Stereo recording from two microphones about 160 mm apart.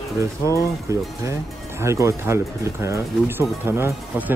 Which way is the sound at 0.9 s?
20° right (ahead or behind).